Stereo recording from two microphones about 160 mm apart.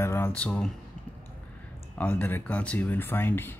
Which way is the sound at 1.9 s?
10° left (ahead or behind).